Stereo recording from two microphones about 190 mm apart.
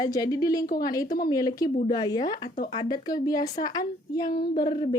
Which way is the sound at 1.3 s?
20° left (ahead or behind).